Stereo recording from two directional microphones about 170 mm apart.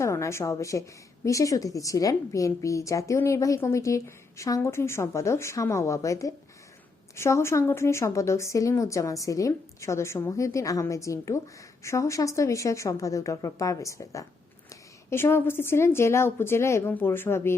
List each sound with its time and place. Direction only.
0.0 s a woman's voice: 15° left (ahead or behind)